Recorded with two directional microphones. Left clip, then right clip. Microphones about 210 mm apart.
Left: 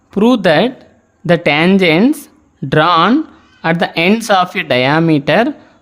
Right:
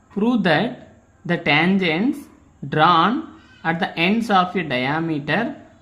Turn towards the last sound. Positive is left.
turn(degrees=55)  # may be behind; listen again after turning